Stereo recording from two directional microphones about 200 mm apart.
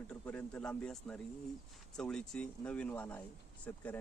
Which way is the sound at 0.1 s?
5° left (ahead or behind).